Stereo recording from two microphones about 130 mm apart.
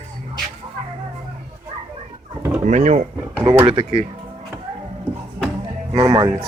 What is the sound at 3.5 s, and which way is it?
Speech, 45° right (ahead or behind).